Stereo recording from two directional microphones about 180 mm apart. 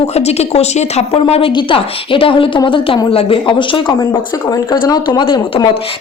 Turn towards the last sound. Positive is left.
turn(degrees=25)  # may be behind; listen again after turning